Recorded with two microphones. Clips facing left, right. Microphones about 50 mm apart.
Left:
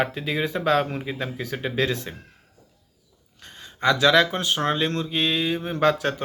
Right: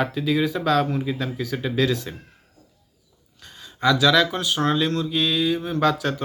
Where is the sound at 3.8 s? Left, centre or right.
Left.